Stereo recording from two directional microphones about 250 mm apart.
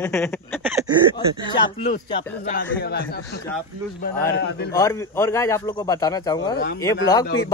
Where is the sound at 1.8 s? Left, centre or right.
Left.